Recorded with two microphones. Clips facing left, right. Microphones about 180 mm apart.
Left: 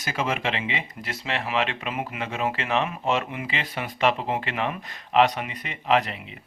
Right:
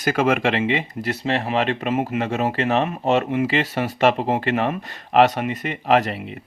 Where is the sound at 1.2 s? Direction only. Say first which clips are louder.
Right 5 dB; 35° right (ahead or behind).